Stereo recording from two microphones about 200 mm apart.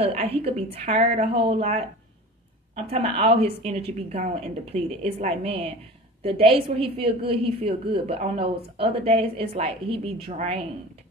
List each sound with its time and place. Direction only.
0.0 s a woman's voice: 30° right (ahead or behind)